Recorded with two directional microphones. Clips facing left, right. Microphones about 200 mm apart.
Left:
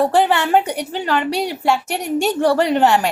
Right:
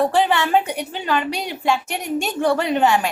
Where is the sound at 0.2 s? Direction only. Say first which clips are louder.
Left 2 dB; 15° left (ahead or behind).